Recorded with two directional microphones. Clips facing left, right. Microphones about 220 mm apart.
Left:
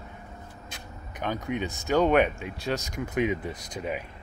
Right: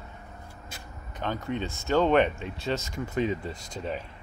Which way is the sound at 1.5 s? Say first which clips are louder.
Even; 15° left (ahead or behind).